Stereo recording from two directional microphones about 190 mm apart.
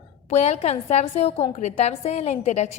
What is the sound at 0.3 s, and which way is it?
A woman's voice, 35° left (ahead or behind).